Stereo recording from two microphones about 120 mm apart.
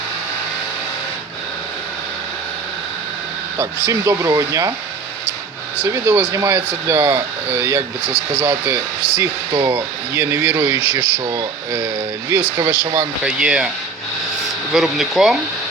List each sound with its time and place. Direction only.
3.8 s speech: 25° right (ahead or behind)
5.8 s speech: 20° right (ahead or behind)
10.2 s speech: 20° right (ahead or behind)
13.2 s speech: 10° right (ahead or behind)
14.7 s speech: 5° right (ahead or behind)